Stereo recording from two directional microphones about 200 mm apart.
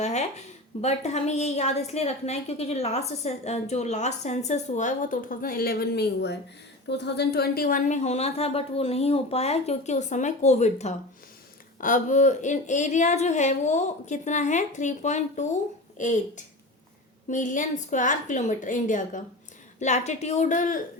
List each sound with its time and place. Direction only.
0.0 s a woman's voice: 35° left (ahead or behind)